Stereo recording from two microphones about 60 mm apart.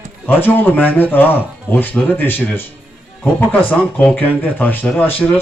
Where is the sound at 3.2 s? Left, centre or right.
Left.